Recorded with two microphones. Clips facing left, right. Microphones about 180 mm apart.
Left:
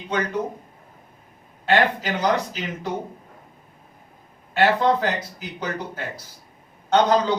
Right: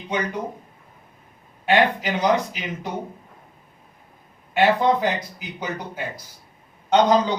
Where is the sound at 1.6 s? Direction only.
15° right (ahead or behind).